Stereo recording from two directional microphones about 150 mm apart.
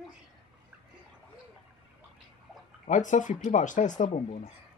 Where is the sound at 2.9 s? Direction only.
55° left (ahead or behind).